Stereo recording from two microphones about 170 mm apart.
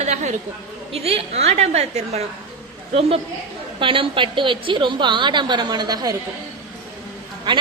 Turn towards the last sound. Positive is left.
turn(degrees=-30)  # may be behind; listen again after turning